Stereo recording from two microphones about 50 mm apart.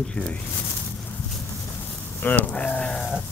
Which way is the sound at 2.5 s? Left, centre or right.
Left.